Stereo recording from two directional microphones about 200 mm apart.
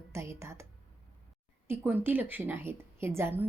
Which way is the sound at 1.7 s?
10° right (ahead or behind).